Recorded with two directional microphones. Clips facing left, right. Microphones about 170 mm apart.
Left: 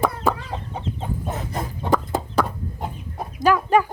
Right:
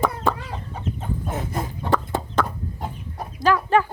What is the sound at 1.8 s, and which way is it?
Chicken, 10° left (ahead or behind).